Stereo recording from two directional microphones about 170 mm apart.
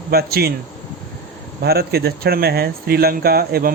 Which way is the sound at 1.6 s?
65° right (ahead or behind).